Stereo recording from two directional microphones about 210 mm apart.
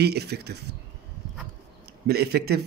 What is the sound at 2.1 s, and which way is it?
Speech, 50° right (ahead or behind).